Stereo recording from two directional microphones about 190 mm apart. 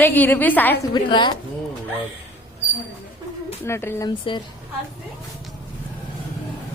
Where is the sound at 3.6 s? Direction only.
15° left (ahead or behind).